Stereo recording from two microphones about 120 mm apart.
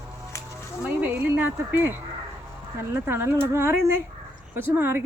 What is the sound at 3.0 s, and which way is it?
Speech, 20° right (ahead or behind).